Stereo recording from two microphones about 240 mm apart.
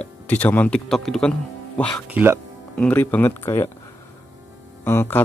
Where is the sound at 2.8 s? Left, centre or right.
Centre.